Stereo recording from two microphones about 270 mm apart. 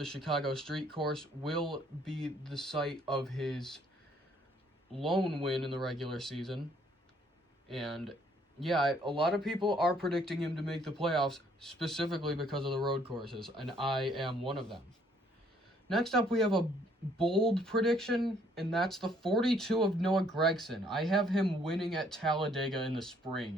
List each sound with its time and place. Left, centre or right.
0.0 s speech: centre
5.0 s speech: centre
5.5 s speech: centre
7.7 s speech: centre
15.9 s speech: centre